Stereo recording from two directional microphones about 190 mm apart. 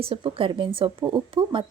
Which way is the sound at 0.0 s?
30° right (ahead or behind).